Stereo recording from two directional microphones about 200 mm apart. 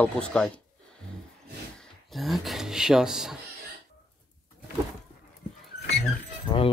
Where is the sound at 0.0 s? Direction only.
5° left (ahead or behind).